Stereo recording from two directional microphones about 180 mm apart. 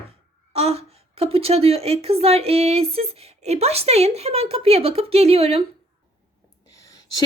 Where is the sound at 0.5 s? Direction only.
35° right (ahead or behind).